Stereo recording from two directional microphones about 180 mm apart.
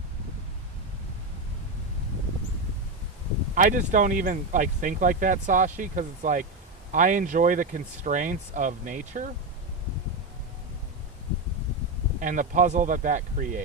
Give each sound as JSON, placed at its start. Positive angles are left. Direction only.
{"t": 3.5, "sound": "speech", "side_deg": -45}
{"t": 12.2, "sound": "speech", "side_deg": -45}